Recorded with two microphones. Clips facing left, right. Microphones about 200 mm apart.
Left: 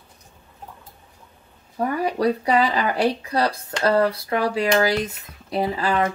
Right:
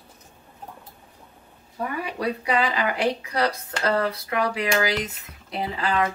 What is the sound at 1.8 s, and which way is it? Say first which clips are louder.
Speech: left 7 dB; 40° left (ahead or behind).